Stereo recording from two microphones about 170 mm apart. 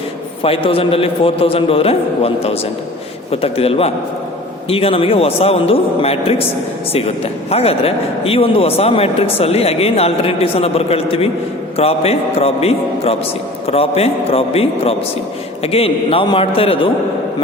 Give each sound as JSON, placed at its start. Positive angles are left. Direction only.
{"t": 0.4, "sound": "speech", "side_deg": 35}
{"t": 7.5, "sound": "speech", "side_deg": 35}